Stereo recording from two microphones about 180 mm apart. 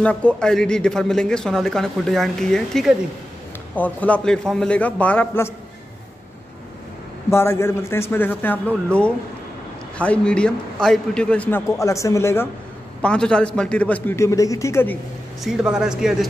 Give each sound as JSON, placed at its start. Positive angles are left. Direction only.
{"t": 0.0, "sound": "a man's voice", "side_deg": 5}
{"t": 7.2, "sound": "a man's voice", "side_deg": 15}
{"t": 15.4, "sound": "a man's voice", "side_deg": -5}